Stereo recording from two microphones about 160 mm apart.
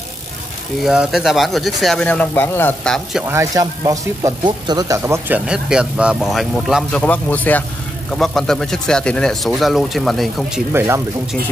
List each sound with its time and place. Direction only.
0.8 s speech: centre (ahead or behind)
2.9 s speech: centre (ahead or behind)
3.3 s speech: 20° right (ahead or behind)
5.5 s speech: 5° right (ahead or behind)
7.0 s speech: 10° left (ahead or behind)